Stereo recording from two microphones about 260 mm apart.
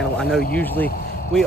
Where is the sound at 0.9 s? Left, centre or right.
Left.